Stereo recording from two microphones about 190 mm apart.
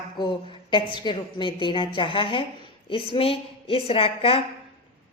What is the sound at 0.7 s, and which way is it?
A woman's voice, 25° left (ahead or behind).